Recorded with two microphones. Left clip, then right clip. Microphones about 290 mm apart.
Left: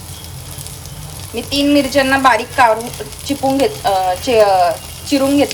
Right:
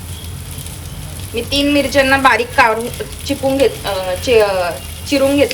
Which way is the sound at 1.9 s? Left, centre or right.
Centre.